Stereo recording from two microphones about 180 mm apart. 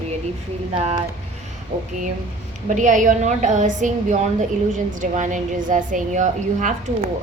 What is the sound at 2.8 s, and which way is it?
A woman's voice, 45° right (ahead or behind).